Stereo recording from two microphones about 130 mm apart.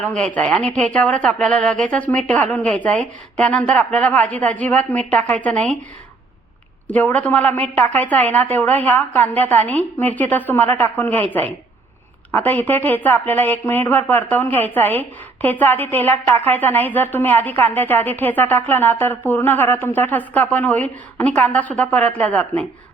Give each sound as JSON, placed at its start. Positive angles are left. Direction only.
{"t": 0.0, "sound": "speech", "side_deg": 10}
{"t": 6.8, "sound": "speech", "side_deg": 10}
{"t": 12.3, "sound": "speech", "side_deg": 15}